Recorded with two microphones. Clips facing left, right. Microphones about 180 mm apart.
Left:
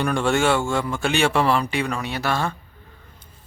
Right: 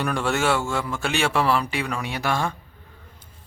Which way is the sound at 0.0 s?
5° right (ahead or behind).